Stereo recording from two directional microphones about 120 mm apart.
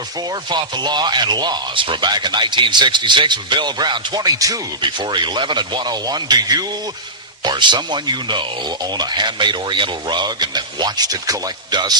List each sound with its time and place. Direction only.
0.5 s a man's voice: 40° right (ahead or behind)